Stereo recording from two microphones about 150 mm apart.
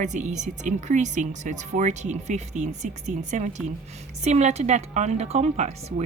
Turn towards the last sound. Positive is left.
turn(degrees=-50)  # may be behind; listen again after turning